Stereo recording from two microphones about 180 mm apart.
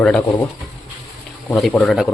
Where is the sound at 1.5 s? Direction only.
5° left (ahead or behind).